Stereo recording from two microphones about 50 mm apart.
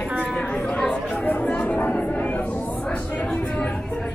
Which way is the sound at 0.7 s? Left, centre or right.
Left.